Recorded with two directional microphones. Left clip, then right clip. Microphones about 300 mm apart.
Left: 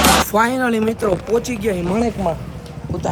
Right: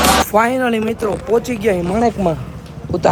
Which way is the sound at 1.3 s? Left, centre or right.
Centre.